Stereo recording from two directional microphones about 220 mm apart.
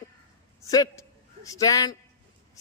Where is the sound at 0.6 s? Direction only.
15° left (ahead or behind).